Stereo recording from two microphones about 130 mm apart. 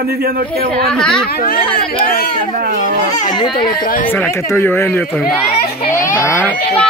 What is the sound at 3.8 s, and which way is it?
Speech, 90° left.